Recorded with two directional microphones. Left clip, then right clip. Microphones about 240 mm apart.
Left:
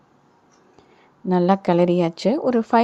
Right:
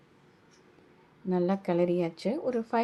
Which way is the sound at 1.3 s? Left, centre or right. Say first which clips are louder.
Left 10 dB; left.